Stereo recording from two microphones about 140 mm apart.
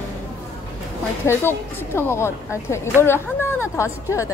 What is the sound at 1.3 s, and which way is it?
A woman's voice, 20° left (ahead or behind).